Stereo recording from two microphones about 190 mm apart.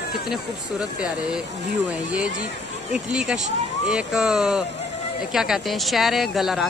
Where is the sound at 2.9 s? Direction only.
5° right (ahead or behind).